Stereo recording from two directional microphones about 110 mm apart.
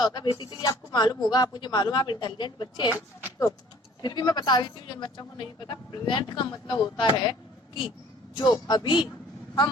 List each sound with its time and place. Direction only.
0.0 s a man's voice: 40° left (ahead or behind)
4.0 s a woman's voice: 40° left (ahead or behind)
8.4 s a woman's voice: 40° left (ahead or behind)